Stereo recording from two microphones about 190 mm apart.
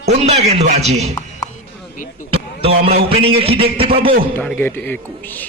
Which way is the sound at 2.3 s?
30° right (ahead or behind).